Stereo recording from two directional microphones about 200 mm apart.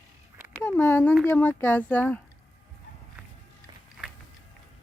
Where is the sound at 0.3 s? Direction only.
10° right (ahead or behind).